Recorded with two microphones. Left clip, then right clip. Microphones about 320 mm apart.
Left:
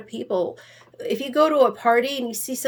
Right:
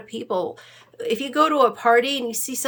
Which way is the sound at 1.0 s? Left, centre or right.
Centre.